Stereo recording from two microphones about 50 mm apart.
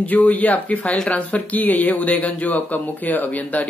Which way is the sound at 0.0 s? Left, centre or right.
Left.